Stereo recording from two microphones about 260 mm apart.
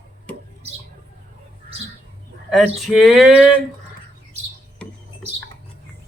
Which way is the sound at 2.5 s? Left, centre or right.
Centre.